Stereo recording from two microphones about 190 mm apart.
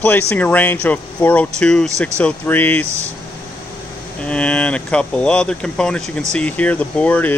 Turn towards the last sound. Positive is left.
turn(degrees=10)  # may be behind; listen again after turning